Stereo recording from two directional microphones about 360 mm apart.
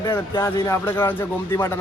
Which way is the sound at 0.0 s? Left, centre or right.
Centre.